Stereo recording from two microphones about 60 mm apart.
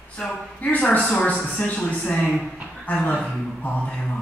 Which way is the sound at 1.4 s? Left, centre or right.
Left.